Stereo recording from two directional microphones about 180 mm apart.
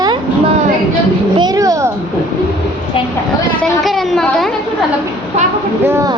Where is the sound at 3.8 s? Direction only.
Centre (ahead or behind).